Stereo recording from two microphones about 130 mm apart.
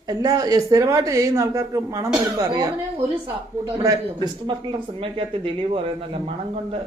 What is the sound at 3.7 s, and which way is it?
Speech, 30° right (ahead or behind).